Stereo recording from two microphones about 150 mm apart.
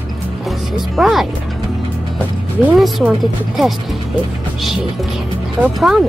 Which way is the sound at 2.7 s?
Centre (ahead or behind).